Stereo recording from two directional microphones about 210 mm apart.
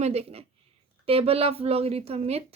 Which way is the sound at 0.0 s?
30° right (ahead or behind).